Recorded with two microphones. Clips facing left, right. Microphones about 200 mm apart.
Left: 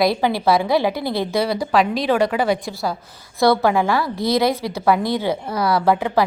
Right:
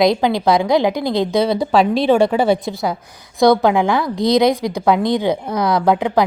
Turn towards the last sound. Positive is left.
turn(degrees=-15)  # may be behind; listen again after turning